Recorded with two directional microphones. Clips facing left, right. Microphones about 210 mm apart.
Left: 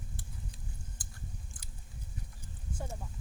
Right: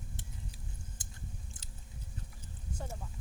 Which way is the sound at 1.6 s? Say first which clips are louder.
Even; 25° right (ahead or behind).